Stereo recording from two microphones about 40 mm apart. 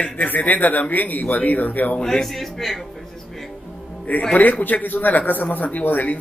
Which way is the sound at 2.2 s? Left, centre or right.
Centre.